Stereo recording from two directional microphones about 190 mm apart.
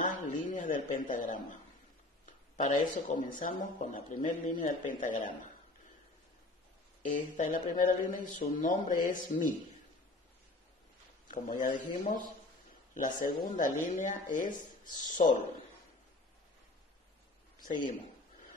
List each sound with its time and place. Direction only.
0.0 s a sound: 45° left (ahead or behind)
2.5 s a man's voice: 40° left (ahead or behind)
7.1 s a man's voice: 40° left (ahead or behind)
11.2 s a man's voice: 45° left (ahead or behind)
12.9 s a man's voice: 45° left (ahead or behind)